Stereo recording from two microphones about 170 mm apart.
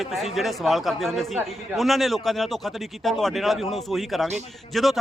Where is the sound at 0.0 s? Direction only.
Centre (ahead or behind).